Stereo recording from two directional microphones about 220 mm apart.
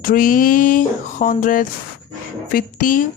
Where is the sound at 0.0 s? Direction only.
40° left (ahead or behind).